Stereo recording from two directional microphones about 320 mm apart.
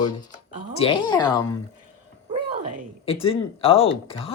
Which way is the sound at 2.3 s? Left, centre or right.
Right.